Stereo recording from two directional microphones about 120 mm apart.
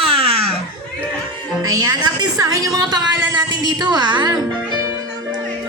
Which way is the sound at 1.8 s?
35° right (ahead or behind).